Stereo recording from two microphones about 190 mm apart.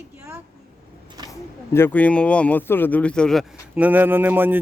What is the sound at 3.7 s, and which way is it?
Speech, 10° right (ahead or behind).